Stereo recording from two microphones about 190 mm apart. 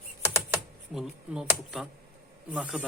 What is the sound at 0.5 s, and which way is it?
Speech, 5° right (ahead or behind).